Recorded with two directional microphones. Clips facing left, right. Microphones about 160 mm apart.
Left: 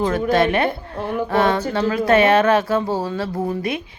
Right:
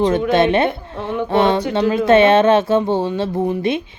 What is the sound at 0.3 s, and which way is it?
Speech, 25° right (ahead or behind).